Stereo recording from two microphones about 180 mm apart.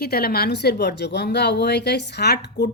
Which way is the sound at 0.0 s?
60° left (ahead or behind).